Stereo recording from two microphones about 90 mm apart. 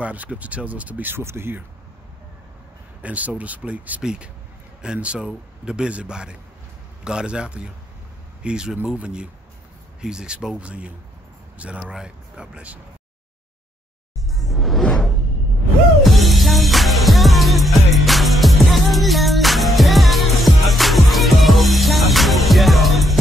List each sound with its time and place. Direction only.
0.0 s speech: 15° right (ahead or behind)
3.0 s speech: 15° right (ahead or behind)
14.3 s whoosh: centre (ahead or behind)
16.0 s music: centre (ahead or behind)